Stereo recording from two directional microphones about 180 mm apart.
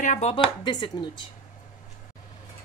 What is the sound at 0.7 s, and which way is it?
Speech, 25° left (ahead or behind).